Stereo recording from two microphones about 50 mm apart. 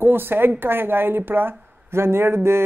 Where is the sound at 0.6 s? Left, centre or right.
Right.